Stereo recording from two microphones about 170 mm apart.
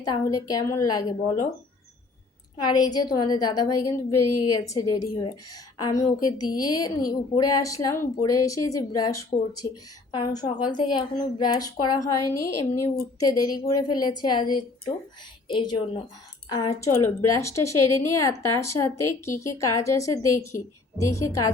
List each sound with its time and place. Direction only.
0.0 s a woman's voice: 20° left (ahead or behind)
2.6 s a woman's voice: 25° left (ahead or behind)